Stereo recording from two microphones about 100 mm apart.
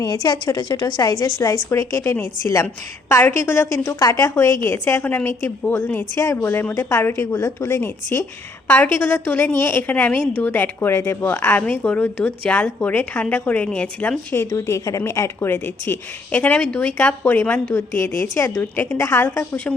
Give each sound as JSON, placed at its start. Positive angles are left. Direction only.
{"t": 0.0, "sound": "a woman's voice", "side_deg": 45}
{"t": 14.5, "sound": "a woman's voice", "side_deg": 35}